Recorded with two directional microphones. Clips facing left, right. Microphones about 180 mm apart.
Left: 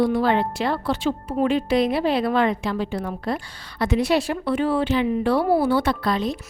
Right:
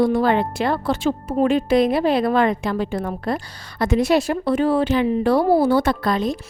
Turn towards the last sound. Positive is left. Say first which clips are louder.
# right 2 dB
turn(degrees=-45)  # may be behind; listen again after turning